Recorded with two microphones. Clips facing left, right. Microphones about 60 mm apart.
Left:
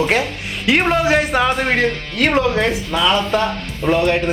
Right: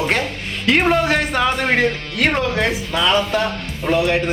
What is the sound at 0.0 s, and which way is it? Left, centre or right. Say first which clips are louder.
Speech: left 2 dB; centre.